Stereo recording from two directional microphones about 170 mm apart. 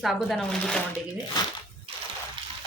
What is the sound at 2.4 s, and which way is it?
Water, 30° right (ahead or behind).